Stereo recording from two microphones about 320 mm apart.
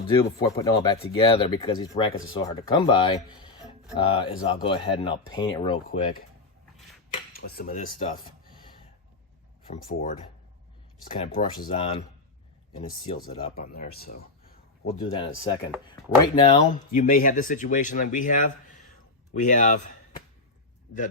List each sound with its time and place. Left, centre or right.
0.1 s speech: centre
7.3 s speech: left
9.6 s speech: centre
11.2 s speech: left
14.8 s speech: centre